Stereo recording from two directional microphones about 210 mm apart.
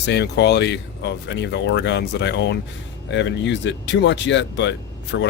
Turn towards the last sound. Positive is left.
turn(degrees=60)  # may be behind; listen again after turning